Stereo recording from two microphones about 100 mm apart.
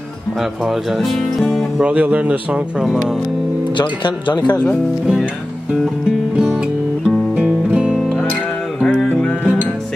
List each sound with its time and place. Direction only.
0.4 s speech: centre (ahead or behind)
1.8 s speech: 15° right (ahead or behind)
3.7 s speech: 50° left (ahead or behind)
6.3 s music: 10° right (ahead or behind)